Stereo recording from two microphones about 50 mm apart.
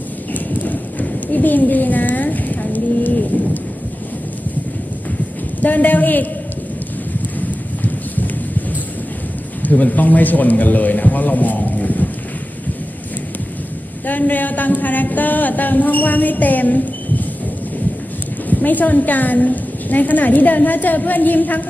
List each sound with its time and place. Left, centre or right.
0.3 s clip-clop: left
5.6 s a woman's voice: left
9.6 s a woman's voice: left
14.0 s a woman's voice: left
18.5 s a woman's voice: left